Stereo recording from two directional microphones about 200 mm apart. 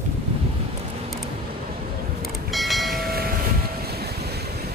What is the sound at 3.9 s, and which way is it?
Waves, 50° right (ahead or behind).